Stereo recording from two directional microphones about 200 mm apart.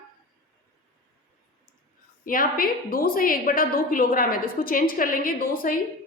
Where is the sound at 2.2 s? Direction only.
45° left (ahead or behind).